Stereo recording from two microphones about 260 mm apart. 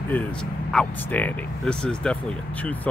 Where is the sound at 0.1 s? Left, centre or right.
Centre.